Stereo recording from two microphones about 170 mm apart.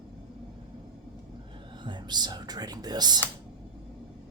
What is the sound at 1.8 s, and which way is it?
Whispering, 25° right (ahead or behind).